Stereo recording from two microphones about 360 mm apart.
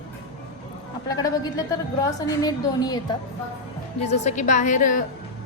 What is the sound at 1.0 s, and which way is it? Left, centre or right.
A woman's voice, centre.